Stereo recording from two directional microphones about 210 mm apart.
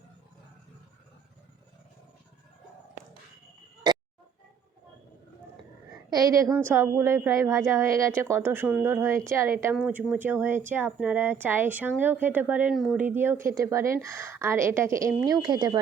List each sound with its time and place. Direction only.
3.9 s music: 20° right (ahead or behind)
6.1 s a woman's voice: 15° right (ahead or behind)